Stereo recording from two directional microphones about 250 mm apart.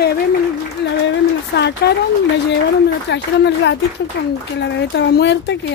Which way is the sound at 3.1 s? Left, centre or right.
Left.